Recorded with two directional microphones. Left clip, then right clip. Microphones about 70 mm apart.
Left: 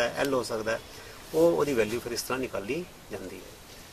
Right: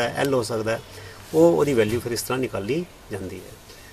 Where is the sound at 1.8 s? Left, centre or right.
Centre.